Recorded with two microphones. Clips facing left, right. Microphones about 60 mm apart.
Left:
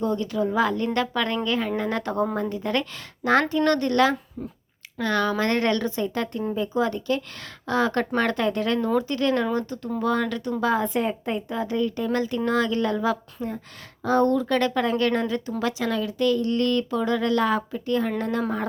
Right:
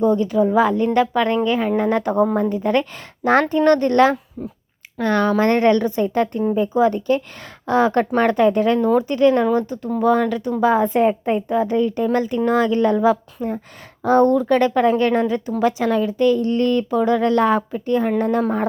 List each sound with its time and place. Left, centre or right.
0.0 s speech: right